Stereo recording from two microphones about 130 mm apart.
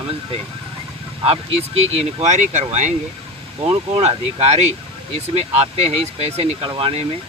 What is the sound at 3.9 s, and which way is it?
Speech, 55° right (ahead or behind).